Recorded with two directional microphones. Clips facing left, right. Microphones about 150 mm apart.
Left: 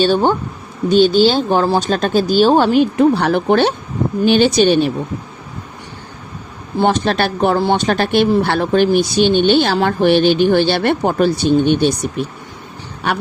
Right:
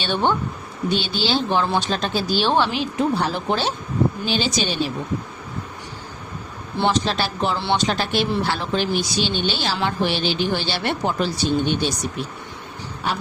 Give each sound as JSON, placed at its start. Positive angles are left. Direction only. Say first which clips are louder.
{"t": 0.0, "sound": "speech", "louder": "left 7 dB", "side_deg": 40}
{"t": 6.7, "sound": "speech", "louder": "left 6 dB", "side_deg": 50}
{"t": 13.0, "sound": "a sound", "louder": "left 6 dB", "side_deg": 70}